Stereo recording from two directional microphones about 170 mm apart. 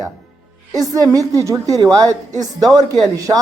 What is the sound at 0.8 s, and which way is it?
Speech, 20° right (ahead or behind).